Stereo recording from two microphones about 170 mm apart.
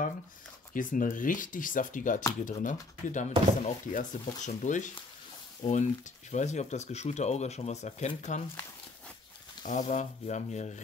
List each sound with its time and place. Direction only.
0.7 s speech: 50° left (ahead or behind)
9.7 s speech: 45° left (ahead or behind)